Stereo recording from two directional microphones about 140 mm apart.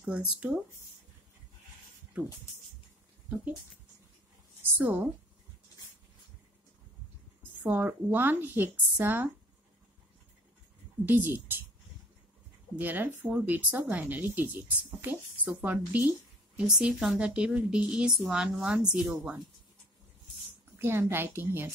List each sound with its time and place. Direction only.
0.0 s speech: 10° right (ahead or behind)
2.1 s speech: 10° right (ahead or behind)
4.7 s speech: 15° right (ahead or behind)
7.6 s speech: 15° right (ahead or behind)
11.1 s speech: 15° right (ahead or behind)
12.7 s a woman's voice: 15° right (ahead or behind)
20.7 s speech: 15° right (ahead or behind)